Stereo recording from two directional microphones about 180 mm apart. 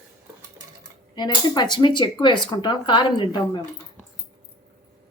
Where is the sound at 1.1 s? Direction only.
25° left (ahead or behind).